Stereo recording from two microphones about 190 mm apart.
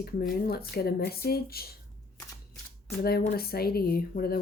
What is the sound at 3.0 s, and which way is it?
Speech, 55° left (ahead or behind).